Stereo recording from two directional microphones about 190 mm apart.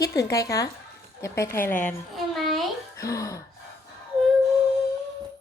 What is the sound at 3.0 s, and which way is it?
Speech, 15° left (ahead or behind).